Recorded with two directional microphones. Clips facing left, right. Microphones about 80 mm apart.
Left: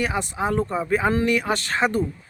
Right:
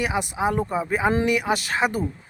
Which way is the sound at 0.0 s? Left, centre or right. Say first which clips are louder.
Right 1 dB; centre.